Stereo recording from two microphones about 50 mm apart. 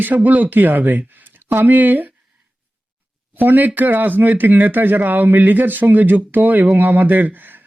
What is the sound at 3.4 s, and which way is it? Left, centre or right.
Speech, right.